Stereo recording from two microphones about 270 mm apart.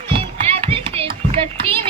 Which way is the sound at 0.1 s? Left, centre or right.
Right.